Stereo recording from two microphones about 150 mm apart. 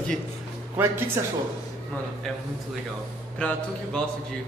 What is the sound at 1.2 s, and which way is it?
Speech, 20° right (ahead or behind).